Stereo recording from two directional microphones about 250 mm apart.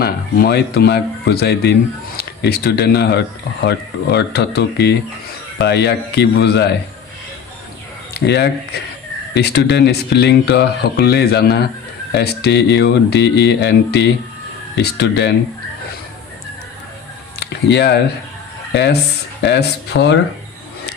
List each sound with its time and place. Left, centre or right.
0.0 s speech: left
8.2 s speech: left
17.4 s a sound: left
18.7 s speech: left